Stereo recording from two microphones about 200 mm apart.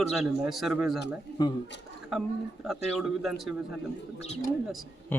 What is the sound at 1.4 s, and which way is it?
Speech, 20° left (ahead or behind).